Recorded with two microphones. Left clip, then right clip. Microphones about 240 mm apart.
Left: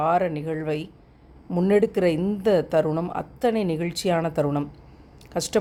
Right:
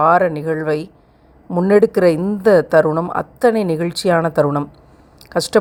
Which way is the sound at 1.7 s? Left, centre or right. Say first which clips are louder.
Right 9 dB; centre.